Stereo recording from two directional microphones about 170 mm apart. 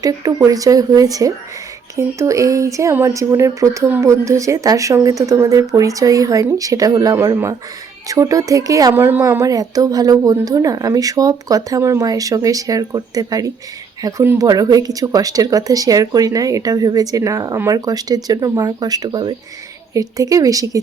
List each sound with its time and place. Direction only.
0.0 s speech: 20° right (ahead or behind)